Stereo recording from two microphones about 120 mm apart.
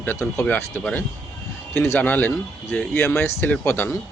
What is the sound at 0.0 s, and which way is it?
A man's voice, 20° left (ahead or behind).